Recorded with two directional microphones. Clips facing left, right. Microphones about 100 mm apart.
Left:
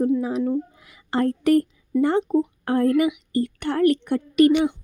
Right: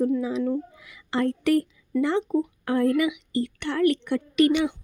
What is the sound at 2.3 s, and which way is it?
A woman's voice, 35° left (ahead or behind).